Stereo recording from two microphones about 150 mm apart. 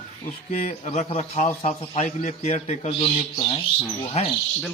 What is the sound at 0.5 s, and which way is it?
Speech, 50° left (ahead or behind).